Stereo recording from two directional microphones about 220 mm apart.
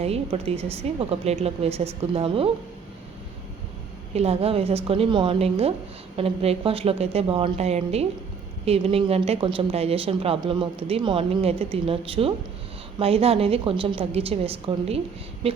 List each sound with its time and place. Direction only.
0.0 s speech: 25° right (ahead or behind)
4.1 s speech: 30° right (ahead or behind)